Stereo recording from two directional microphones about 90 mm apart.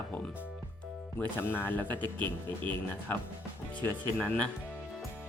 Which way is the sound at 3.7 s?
15° left (ahead or behind).